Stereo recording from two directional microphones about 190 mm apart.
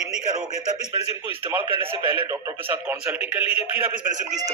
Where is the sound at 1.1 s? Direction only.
10° right (ahead or behind).